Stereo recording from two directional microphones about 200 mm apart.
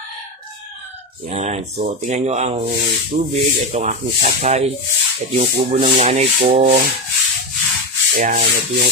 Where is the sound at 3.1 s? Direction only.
30° right (ahead or behind).